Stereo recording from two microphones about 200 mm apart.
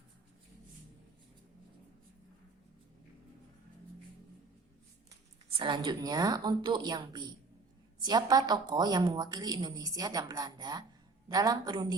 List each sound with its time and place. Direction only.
5.5 s a woman's voice: 25° right (ahead or behind)